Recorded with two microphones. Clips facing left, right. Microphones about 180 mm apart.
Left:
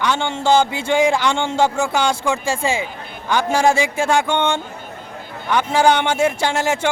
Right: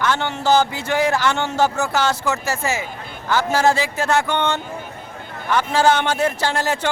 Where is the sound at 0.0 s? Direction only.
20° left (ahead or behind).